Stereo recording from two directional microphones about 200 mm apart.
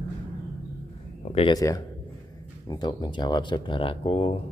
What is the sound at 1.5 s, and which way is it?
Speech, 15° left (ahead or behind).